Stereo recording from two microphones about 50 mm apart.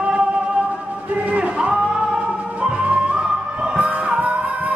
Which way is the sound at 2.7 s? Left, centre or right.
Right.